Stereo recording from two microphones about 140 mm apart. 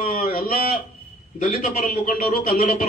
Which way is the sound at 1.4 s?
65° left (ahead or behind).